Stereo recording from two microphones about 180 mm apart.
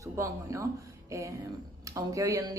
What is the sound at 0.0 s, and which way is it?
Speech, 15° right (ahead or behind).